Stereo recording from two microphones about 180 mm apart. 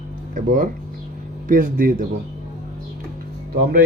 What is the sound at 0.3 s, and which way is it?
Speech, 45° right (ahead or behind).